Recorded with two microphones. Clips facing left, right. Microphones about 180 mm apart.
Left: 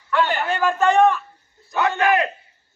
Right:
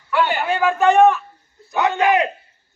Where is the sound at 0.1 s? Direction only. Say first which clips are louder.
Right 2 dB; 10° right (ahead or behind).